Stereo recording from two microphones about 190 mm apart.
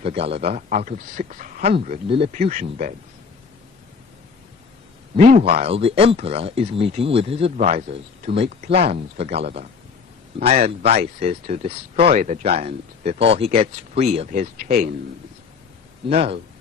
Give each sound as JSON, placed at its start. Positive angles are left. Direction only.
{"t": 0.0, "sound": "speech", "side_deg": -30}
{"t": 5.1, "sound": "speech", "side_deg": -40}
{"t": 16.0, "sound": "speech", "side_deg": -30}